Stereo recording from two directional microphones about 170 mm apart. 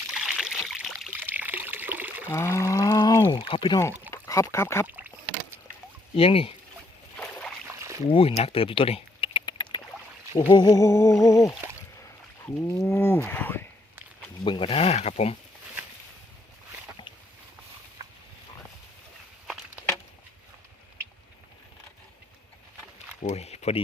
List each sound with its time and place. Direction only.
0.1 s trickle: 5° right (ahead or behind)
1.1 s trickle: 10° right (ahead or behind)
2.3 s a sound: 15° left (ahead or behind)
4.1 s speech: 20° left (ahead or behind)
4.9 s rowboat: 10° right (ahead or behind)
6.1 s speech: 35° left (ahead or behind)
7.7 s a sound: 15° right (ahead or behind)
8.1 s a sound: 35° left (ahead or behind)
10.5 s cattle: 20° left (ahead or behind)
12.5 s cattle: 15° left (ahead or behind)
14.4 s speech: 30° left (ahead or behind)
23.2 s a sound: 40° left (ahead or behind)